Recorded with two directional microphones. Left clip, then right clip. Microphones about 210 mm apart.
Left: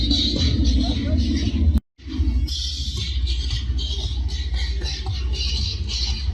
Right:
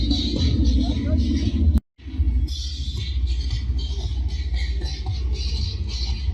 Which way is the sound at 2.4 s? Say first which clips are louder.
Left 7 dB; centre (ahead or behind).